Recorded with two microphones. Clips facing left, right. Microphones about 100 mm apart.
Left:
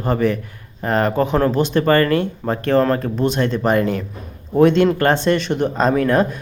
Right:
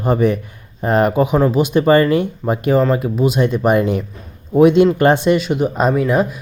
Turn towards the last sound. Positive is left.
turn(degrees=-5)  # may be behind; listen again after turning